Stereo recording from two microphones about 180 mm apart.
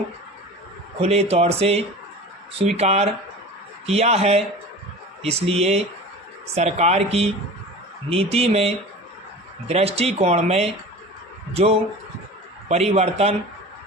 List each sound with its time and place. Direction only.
1.0 s speech: 35° right (ahead or behind)